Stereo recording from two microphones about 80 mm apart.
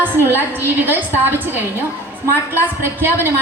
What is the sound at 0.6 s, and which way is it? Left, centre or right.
A woman's voice, right.